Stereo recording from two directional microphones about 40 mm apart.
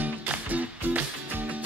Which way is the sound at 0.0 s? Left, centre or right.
Right.